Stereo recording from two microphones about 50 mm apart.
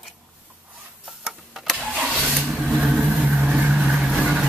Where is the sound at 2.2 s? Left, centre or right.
Centre.